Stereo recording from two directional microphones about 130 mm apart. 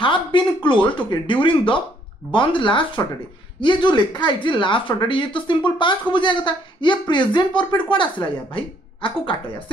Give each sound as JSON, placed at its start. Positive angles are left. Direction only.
{"t": 0.0, "sound": "speech", "side_deg": 40}